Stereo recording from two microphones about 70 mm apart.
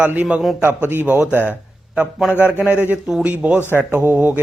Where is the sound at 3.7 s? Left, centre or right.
Right.